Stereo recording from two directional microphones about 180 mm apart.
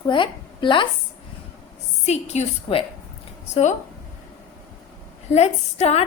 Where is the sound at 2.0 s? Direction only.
40° left (ahead or behind).